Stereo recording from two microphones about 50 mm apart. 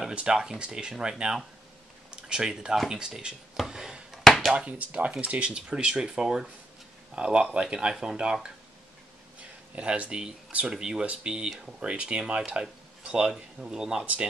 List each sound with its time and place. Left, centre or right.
0.1 s speech: centre
3.5 s a sound: centre
4.5 s speech: centre
9.8 s speech: right
13.0 s a sound: centre
13.3 s speech: centre